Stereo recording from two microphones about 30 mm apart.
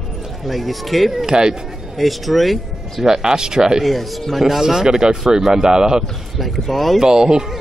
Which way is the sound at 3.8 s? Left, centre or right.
Centre.